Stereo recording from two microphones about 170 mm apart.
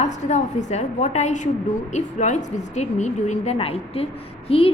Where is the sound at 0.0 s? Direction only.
45° left (ahead or behind).